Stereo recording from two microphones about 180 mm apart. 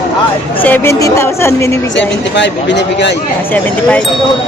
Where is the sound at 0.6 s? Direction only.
10° left (ahead or behind).